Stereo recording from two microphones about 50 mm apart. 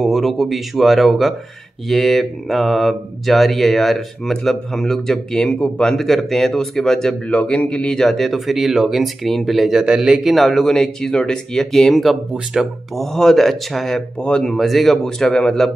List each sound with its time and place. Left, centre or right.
0.0 s speech: centre
7.2 s speech: left
8.0 s speech: centre
9.8 s a man's voice: centre
15.0 s speech: centre